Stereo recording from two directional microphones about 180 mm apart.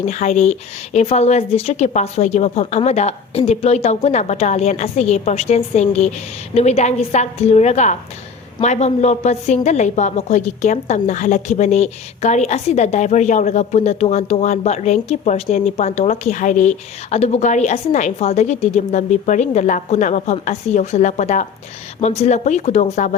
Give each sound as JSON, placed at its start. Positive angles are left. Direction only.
{"t": 0.0, "sound": "a woman's voice", "side_deg": 40}